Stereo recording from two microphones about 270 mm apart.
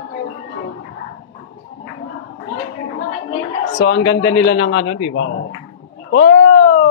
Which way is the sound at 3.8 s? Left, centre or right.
Left.